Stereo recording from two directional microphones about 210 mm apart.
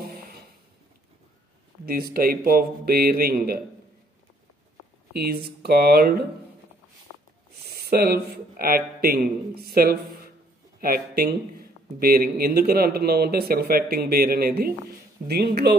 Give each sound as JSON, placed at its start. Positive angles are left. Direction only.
{"t": 1.9, "sound": "speech", "side_deg": -45}
{"t": 5.1, "sound": "speech", "side_deg": -50}
{"t": 7.7, "sound": "speech", "side_deg": -50}